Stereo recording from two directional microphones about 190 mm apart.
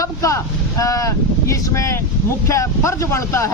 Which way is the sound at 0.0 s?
15° left (ahead or behind).